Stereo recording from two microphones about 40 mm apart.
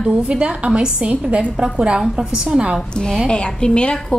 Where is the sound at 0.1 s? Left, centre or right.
Right.